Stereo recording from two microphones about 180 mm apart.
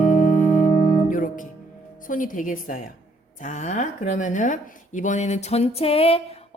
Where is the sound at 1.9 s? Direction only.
50° left (ahead or behind).